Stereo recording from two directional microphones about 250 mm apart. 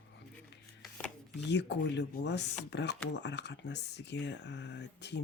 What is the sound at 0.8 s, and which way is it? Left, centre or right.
Chopping, centre.